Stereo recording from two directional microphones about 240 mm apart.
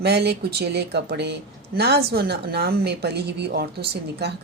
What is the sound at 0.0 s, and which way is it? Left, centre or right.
Speech, right.